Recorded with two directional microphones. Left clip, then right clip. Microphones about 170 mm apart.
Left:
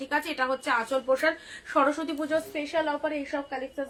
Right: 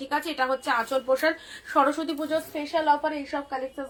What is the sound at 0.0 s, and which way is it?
A woman's voice, 20° left (ahead or behind).